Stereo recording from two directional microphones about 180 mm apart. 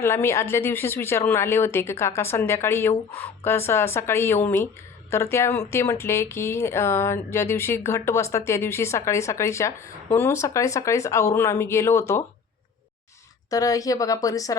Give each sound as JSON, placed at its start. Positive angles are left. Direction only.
{"t": 0.0, "sound": "speech", "side_deg": 15}
{"t": 13.5, "sound": "speech", "side_deg": 20}